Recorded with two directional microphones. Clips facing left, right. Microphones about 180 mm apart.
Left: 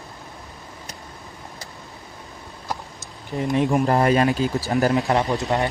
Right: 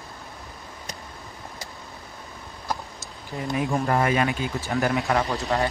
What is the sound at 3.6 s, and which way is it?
Speech, 20° left (ahead or behind).